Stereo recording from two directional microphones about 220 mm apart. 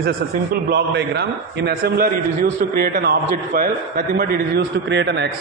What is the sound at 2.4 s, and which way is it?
A man's voice, 40° right (ahead or behind).